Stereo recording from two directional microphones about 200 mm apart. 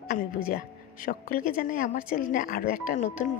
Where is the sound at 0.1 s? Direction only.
45° left (ahead or behind).